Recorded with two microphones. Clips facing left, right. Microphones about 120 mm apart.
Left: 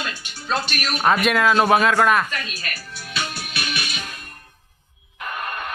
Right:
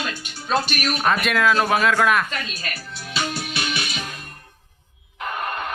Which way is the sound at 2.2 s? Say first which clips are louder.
Right 1 dB; 25° right (ahead or behind).